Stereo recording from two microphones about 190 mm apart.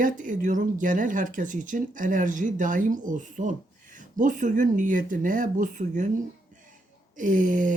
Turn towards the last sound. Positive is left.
turn(degrees=-45)  # may be behind; listen again after turning